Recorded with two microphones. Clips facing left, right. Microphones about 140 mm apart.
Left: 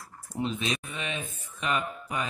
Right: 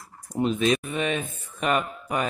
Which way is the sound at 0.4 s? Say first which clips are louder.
Right 8 dB; 50° right (ahead or behind).